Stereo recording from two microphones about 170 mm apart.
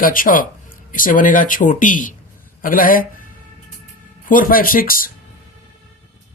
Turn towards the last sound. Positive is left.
turn(degrees=55)  # may be behind; listen again after turning